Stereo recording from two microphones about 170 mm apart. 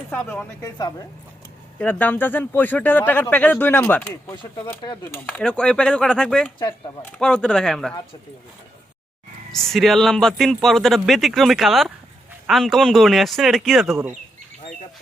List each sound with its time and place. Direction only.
0.1 s speech: 10° left (ahead or behind)
0.6 s speech: 20° left (ahead or behind)
1.8 s speech: 10° left (ahead or behind)
5.4 s a man's voice: 5° left (ahead or behind)
9.5 s a man's voice: centre (ahead or behind)